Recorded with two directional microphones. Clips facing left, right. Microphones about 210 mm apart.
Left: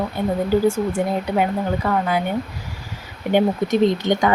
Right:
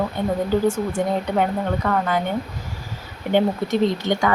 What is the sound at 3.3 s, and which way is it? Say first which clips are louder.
Speech: left 2 dB; 15° left (ahead or behind).